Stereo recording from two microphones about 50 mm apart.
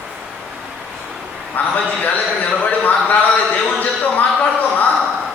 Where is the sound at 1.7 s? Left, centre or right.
Left.